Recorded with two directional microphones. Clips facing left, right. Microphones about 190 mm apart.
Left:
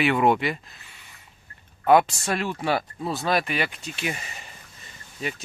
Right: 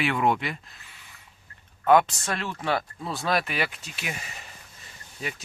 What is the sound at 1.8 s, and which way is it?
Speech, 10° left (ahead or behind).